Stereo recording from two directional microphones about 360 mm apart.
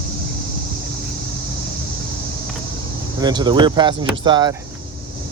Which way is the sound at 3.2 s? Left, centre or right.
Centre.